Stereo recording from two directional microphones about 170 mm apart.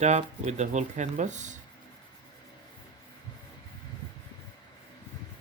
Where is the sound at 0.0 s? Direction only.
40° right (ahead or behind).